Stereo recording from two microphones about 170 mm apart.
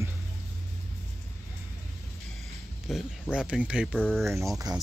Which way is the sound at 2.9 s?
Centre (ahead or behind).